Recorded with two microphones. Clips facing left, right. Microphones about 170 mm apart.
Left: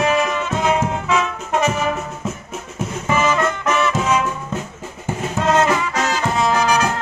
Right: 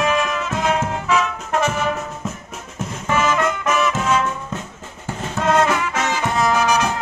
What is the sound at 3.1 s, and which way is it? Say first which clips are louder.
Music: left 1 dB; 5° left (ahead or behind).